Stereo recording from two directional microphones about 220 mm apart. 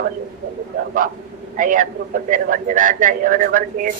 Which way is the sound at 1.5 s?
40° right (ahead or behind).